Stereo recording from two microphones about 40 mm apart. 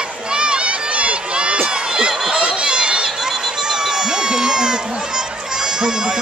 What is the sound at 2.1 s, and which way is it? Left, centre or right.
Run, centre.